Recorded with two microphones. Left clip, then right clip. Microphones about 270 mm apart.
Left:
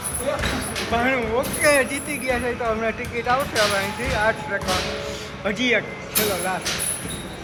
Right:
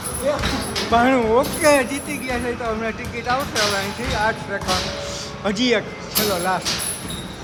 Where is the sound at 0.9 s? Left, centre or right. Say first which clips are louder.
Right 6 dB; centre.